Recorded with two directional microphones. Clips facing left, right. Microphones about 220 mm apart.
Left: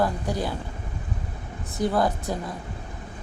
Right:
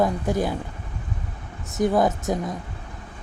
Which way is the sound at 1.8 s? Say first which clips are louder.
Right 3 dB; 20° right (ahead or behind).